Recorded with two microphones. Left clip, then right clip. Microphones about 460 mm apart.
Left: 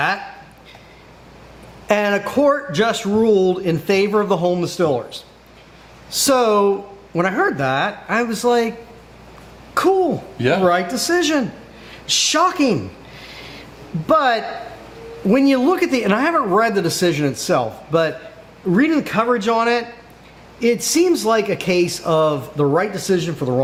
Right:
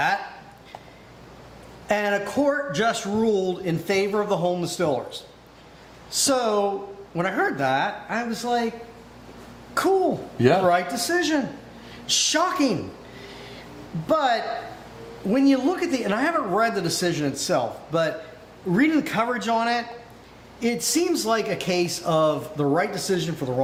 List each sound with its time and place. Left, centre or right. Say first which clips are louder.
1.9 s a man's voice: left 6 dB; left
9.8 s speech: left 6 dB; left
10.3 s a man's voice: even; centre
10.7 s a man's voice: left 4 dB; left
14.1 s a man's voice: left 6 dB; left